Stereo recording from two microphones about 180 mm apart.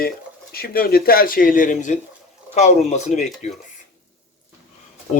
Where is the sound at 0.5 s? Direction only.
55° left (ahead or behind); by 3.5 s 40° left (ahead or behind).